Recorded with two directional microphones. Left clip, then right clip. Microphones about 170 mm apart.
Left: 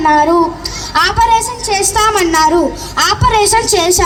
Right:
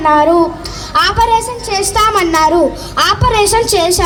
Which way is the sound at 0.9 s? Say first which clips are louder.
Even; 50° right (ahead or behind).